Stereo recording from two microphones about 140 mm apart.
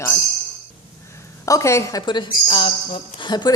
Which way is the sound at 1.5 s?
20° left (ahead or behind).